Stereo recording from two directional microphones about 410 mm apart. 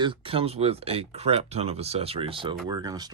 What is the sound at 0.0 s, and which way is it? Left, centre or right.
Speech, centre.